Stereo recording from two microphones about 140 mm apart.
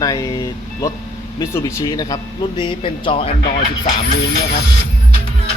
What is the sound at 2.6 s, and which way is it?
Speech, 35° left (ahead or behind).